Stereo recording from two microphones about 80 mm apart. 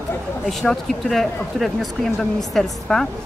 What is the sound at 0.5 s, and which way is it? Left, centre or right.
Speech, centre.